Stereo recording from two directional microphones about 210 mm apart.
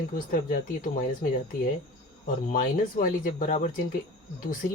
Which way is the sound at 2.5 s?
40° left (ahead or behind).